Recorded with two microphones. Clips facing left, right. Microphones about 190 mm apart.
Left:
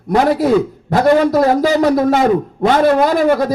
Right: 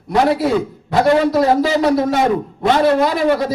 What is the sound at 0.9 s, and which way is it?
A man's voice, 45° left (ahead or behind).